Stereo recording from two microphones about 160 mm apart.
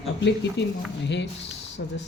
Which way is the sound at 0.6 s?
90° left.